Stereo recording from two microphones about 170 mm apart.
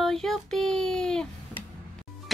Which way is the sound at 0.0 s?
Centre (ahead or behind).